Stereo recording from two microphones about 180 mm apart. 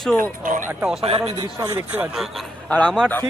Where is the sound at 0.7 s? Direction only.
10° right (ahead or behind).